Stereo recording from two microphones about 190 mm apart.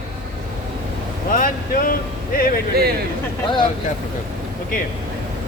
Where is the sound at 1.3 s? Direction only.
45° left (ahead or behind).